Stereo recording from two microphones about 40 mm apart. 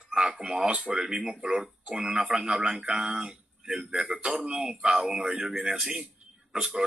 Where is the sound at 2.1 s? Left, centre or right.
Centre.